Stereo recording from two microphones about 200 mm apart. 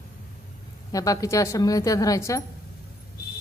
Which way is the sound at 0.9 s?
15° left (ahead or behind).